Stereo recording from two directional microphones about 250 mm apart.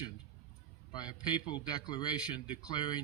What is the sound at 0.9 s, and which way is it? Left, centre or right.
A man's voice, centre.